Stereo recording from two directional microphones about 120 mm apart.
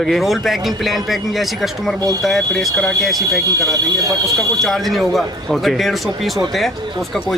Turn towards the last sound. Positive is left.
turn(degrees=0)  # may be behind; listen again after turning